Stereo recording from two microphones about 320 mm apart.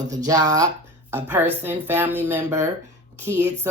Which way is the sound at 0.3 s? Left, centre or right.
Centre.